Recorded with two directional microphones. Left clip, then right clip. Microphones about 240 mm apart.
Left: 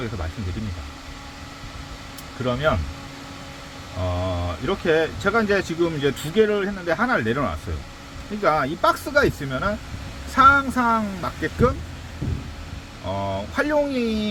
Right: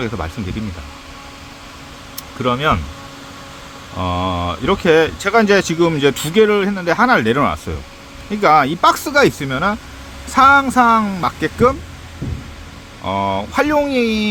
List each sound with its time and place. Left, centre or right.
2.4 s speech: right
4.1 s speech: right
13.1 s speech: right